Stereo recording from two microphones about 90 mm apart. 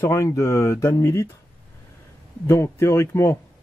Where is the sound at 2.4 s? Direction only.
30° left (ahead or behind).